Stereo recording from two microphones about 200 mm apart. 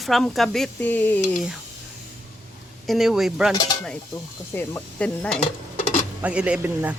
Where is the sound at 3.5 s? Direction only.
20° left (ahead or behind).